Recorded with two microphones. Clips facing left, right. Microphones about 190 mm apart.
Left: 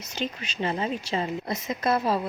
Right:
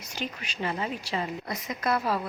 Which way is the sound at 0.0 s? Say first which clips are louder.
Left 4 dB; 25° left (ahead or behind).